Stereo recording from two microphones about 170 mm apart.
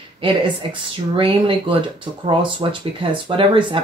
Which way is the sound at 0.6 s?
30° right (ahead or behind).